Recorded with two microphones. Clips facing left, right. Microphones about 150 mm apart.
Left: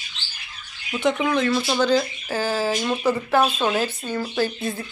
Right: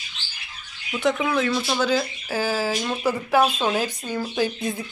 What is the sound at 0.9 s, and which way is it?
Speech, 5° right (ahead or behind).